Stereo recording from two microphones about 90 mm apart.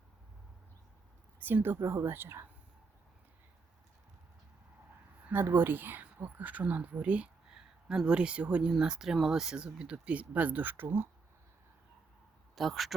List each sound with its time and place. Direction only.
1.4 s a woman's voice: 20° right (ahead or behind)
5.2 s speech: 20° right (ahead or behind)
12.5 s speech: centre (ahead or behind)